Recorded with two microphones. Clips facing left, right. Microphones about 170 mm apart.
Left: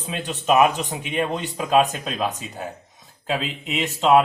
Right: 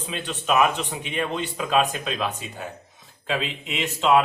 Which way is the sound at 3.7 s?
40° left (ahead or behind).